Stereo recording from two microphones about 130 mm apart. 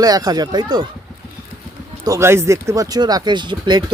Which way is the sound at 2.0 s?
25° right (ahead or behind).